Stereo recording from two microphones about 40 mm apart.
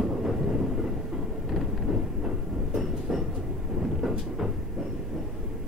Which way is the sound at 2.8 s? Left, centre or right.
Centre.